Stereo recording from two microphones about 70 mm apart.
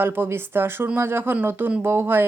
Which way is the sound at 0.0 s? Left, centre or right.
Right.